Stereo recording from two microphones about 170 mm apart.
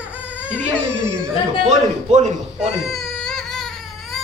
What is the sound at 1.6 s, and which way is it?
Speech, 40° right (ahead or behind).